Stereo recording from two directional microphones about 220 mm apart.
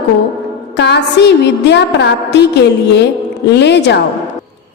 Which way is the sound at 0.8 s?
50° left (ahead or behind).